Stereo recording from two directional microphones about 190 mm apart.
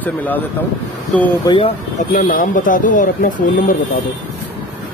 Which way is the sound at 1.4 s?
25° left (ahead or behind).